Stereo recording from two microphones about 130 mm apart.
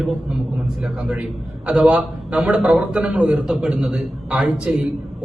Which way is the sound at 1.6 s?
10° right (ahead or behind).